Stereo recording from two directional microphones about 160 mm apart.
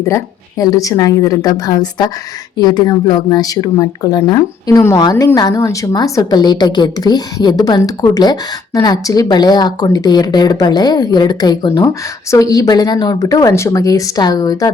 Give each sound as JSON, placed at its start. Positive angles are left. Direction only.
{"t": 0.0, "sound": "a woman's voice", "side_deg": 20}